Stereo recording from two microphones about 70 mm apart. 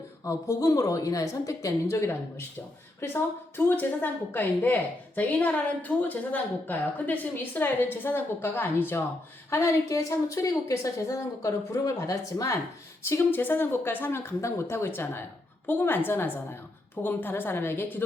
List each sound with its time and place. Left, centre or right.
0.3 s a woman's voice: left
13.0 s a woman's voice: left